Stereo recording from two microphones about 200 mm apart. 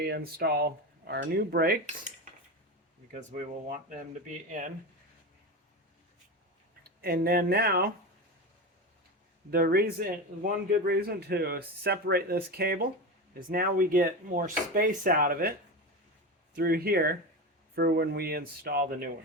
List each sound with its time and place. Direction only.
0.0 s speech: 50° right (ahead or behind)
4.6 s speech: 40° right (ahead or behind)
7.0 s speech: 50° right (ahead or behind)
9.5 s speech: 50° right (ahead or behind)
16.6 s speech: 50° right (ahead or behind)